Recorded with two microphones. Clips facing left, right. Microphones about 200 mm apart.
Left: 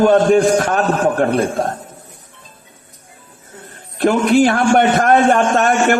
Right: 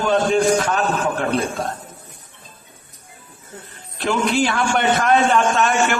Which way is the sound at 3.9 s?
55° left (ahead or behind).